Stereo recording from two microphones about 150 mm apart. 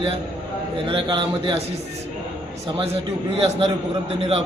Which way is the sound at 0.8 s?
35° right (ahead or behind).